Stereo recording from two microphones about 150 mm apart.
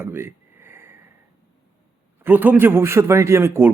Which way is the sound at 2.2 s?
10° right (ahead or behind).